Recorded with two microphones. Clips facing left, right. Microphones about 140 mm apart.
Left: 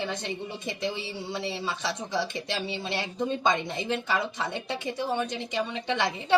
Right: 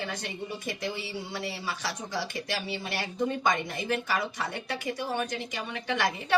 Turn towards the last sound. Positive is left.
turn(degrees=25)  # may be behind; listen again after turning